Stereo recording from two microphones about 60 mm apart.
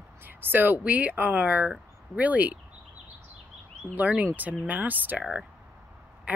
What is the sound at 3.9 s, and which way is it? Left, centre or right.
Speech, right.